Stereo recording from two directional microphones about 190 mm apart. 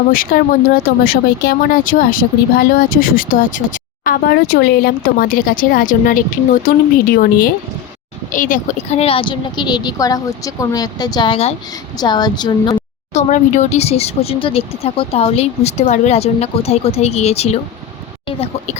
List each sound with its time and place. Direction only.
0.1 s a woman's voice: 50° left (ahead or behind); by 12.8 s 25° left (ahead or behind)
13.1 s speech: 40° left (ahead or behind)